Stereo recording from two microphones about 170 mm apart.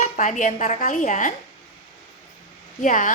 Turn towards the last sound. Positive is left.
turn(degrees=50)  # may be behind; listen again after turning